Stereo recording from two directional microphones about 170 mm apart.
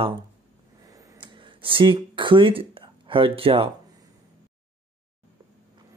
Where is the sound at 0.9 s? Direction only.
20° right (ahead or behind).